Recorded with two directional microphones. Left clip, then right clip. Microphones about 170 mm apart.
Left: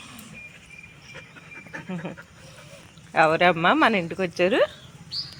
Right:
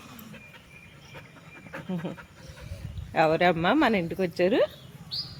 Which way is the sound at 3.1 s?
5° right (ahead or behind).